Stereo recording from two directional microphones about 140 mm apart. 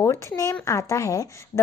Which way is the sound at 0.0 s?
20° left (ahead or behind).